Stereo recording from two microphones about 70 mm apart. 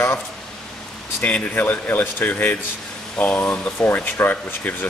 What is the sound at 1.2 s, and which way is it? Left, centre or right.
Speech, left.